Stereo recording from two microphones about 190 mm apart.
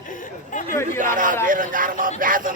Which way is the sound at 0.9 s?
45° right (ahead or behind).